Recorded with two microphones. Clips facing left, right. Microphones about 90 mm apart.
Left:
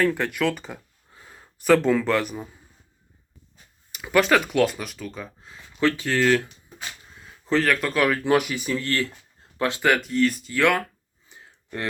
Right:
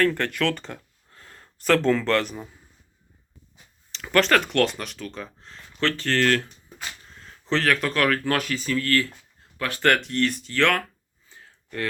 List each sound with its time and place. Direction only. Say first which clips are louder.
0.0 s speech: even; 5° left (ahead or behind)
3.9 s speech: left 1 dB; 10° left (ahead or behind)
9.8 s speech: even; 5° left (ahead or behind)
11.3 s a sound: left 4 dB; 20° left (ahead or behind)